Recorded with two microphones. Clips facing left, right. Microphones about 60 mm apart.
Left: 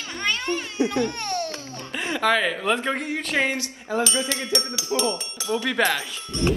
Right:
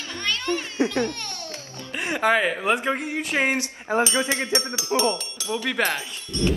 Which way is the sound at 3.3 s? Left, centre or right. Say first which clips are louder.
Right 1 dB; right.